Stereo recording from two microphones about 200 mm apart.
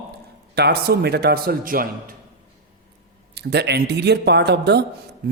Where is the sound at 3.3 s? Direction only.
55° right (ahead or behind).